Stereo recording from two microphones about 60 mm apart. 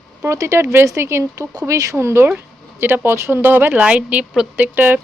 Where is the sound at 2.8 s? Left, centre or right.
Right.